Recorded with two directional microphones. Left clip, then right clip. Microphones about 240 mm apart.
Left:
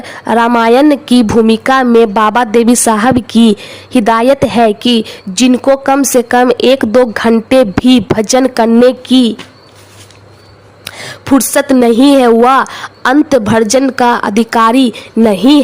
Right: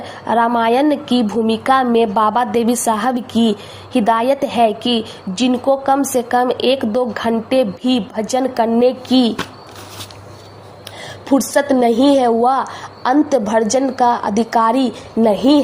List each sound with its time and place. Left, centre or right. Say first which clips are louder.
0.1 s a woman's voice: left 5 dB; left
10.8 s speech: left 6 dB; left